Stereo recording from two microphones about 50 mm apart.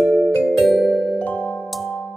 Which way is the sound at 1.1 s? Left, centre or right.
Left.